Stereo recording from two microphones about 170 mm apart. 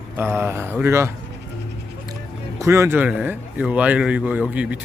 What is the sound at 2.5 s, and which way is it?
Speech, 15° right (ahead or behind).